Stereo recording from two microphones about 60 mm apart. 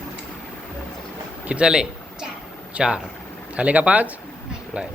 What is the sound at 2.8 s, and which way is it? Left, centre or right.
Speech, centre.